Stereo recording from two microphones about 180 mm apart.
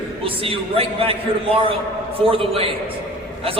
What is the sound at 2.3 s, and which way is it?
Speech, 30° right (ahead or behind).